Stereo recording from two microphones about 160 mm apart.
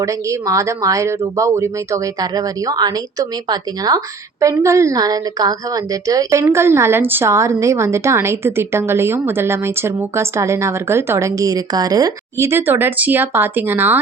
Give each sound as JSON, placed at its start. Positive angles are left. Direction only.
{"t": 0.0, "sound": "speech", "side_deg": -20}